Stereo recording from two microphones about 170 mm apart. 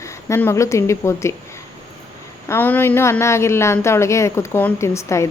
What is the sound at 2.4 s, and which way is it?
A woman's voice, 10° left (ahead or behind).